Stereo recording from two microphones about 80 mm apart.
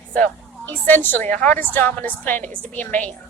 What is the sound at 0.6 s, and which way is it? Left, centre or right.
A woman's voice, left.